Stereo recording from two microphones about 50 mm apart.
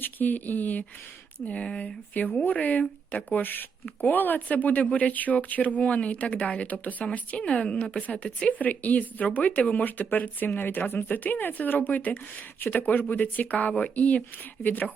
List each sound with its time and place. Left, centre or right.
0.0 s speech: left